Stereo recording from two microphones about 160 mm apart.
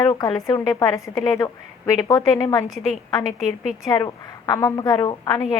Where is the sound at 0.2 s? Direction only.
20° left (ahead or behind).